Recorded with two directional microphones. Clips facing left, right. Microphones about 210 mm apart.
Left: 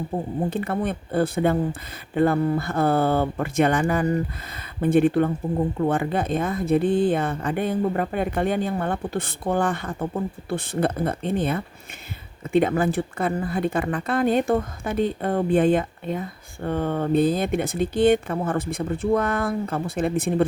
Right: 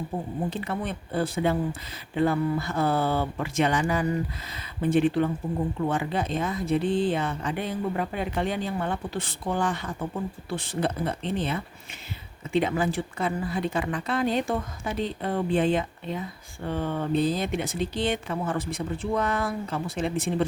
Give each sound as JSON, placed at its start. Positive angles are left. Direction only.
{"t": 0.5, "sound": "a woman's voice", "side_deg": 55}